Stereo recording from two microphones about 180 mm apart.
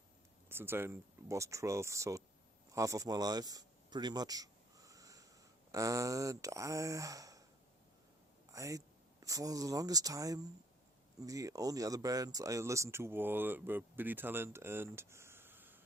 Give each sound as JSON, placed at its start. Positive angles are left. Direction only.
{"t": 0.4, "sound": "speech", "side_deg": -15}
{"t": 2.7, "sound": "a sound", "side_deg": -20}
{"t": 5.7, "sound": "speech", "side_deg": -20}
{"t": 8.5, "sound": "speech", "side_deg": -20}